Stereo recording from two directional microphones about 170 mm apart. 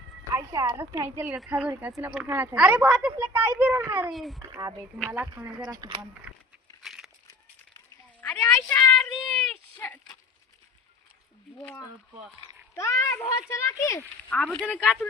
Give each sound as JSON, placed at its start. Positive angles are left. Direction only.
{"t": 0.3, "sound": "speech", "side_deg": -20}
{"t": 4.1, "sound": "a child's voice", "side_deg": 0}
{"t": 4.4, "sound": "speech", "side_deg": -20}
{"t": 5.7, "sound": "speech", "side_deg": -25}
{"t": 6.3, "sound": "a sound", "side_deg": -5}
{"t": 8.2, "sound": "a sound", "side_deg": 10}
{"t": 11.5, "sound": "a man's voice", "side_deg": 5}